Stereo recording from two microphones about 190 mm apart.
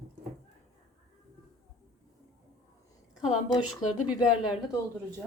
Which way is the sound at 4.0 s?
5° right (ahead or behind).